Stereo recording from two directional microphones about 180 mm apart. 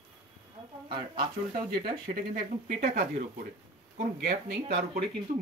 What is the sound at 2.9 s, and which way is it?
Speech, 60° right (ahead or behind).